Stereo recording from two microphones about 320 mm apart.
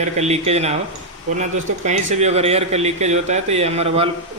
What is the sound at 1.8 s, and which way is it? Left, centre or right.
A man's voice, right.